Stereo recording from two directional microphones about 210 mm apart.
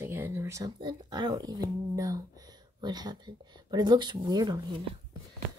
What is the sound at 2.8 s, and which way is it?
Speech, 20° right (ahead or behind).